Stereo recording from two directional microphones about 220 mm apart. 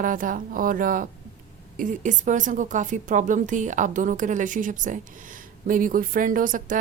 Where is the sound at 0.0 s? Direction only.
40° right (ahead or behind).